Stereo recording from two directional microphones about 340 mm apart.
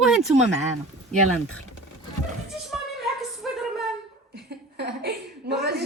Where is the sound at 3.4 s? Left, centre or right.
Centre.